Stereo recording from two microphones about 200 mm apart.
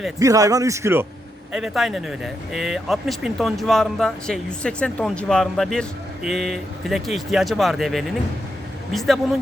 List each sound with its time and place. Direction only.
0.2 s speech: 15° right (ahead or behind)
1.5 s speech: centre (ahead or behind)